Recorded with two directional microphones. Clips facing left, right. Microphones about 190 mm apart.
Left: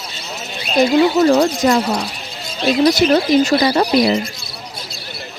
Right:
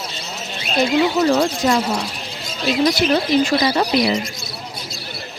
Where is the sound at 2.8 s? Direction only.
40° left (ahead or behind).